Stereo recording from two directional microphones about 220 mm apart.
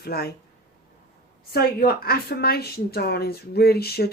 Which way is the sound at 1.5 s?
45° left (ahead or behind).